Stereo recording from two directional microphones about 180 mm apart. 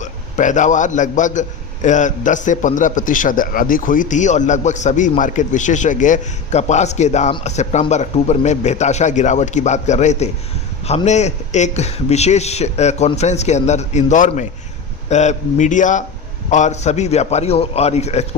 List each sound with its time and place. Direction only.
0.0 s a man's voice: 45° left (ahead or behind)